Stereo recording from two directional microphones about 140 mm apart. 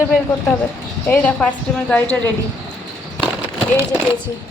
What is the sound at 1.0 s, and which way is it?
A woman's voice, 10° left (ahead or behind).